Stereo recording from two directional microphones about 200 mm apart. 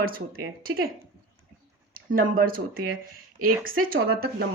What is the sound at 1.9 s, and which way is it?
Speech, 45° right (ahead or behind).